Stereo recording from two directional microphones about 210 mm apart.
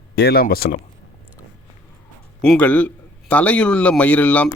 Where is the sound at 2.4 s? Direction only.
5° left (ahead or behind).